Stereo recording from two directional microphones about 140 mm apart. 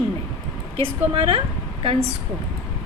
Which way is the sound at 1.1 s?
45° right (ahead or behind).